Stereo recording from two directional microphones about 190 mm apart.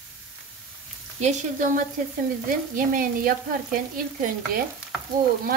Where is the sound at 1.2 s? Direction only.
35° right (ahead or behind).